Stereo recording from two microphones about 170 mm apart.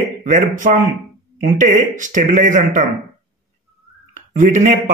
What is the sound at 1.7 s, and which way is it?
Speech, 50° right (ahead or behind).